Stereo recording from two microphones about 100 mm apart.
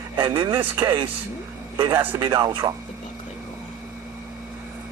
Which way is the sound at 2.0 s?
20° right (ahead or behind).